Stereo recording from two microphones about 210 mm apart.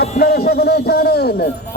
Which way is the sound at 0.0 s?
50° left (ahead or behind).